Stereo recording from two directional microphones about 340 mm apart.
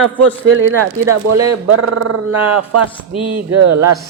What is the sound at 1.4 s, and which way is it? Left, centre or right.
A man's voice, right.